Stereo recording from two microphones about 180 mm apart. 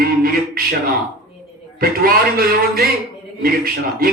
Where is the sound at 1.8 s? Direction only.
55° right (ahead or behind).